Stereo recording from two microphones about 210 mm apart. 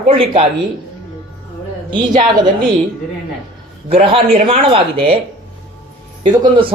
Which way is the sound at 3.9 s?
30° right (ahead or behind).